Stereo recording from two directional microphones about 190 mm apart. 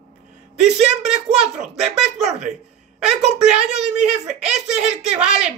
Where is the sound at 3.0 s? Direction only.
5° right (ahead or behind).